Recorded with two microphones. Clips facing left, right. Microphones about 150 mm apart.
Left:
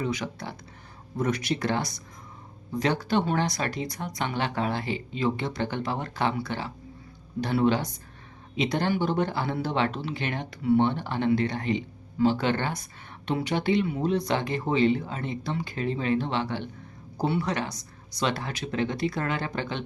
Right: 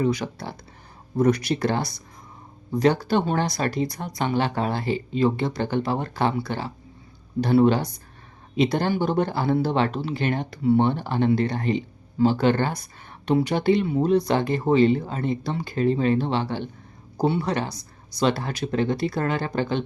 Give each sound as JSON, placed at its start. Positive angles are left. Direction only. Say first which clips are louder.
{"t": 0.0, "sound": "speech", "louder": "right 6 dB", "side_deg": -35}